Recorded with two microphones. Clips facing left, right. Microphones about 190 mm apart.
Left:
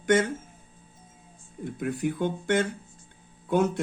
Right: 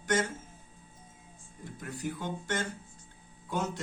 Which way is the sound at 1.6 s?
60° left (ahead or behind).